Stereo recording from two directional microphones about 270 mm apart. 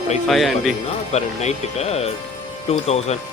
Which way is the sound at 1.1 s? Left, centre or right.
Left.